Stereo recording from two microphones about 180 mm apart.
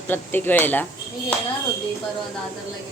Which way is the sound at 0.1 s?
10° left (ahead or behind).